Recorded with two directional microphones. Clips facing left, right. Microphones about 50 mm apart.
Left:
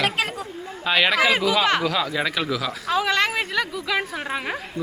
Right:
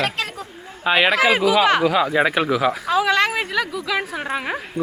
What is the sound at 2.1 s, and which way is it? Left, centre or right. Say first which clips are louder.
Speech: right 6 dB; right.